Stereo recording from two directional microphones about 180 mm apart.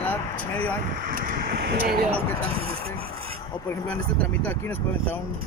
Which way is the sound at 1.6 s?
60° right (ahead or behind).